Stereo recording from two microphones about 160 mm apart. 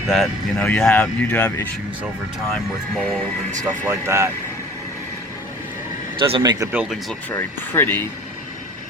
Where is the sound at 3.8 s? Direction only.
15° right (ahead or behind).